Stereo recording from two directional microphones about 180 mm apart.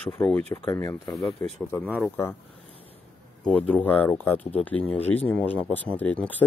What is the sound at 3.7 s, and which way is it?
Speech, 10° left (ahead or behind).